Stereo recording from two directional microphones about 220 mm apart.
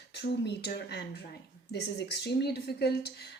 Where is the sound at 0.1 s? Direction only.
50° left (ahead or behind).